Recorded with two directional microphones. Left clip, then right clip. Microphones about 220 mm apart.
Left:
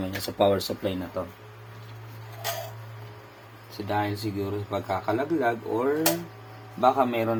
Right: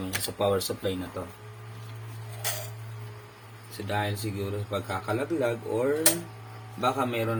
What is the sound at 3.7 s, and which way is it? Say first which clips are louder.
Speech: left 3 dB; 20° left (ahead or behind).